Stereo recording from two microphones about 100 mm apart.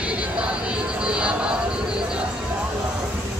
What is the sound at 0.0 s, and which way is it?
Music, 10° right (ahead or behind).